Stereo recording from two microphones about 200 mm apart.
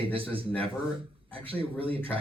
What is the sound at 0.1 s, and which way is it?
Speech, 25° right (ahead or behind).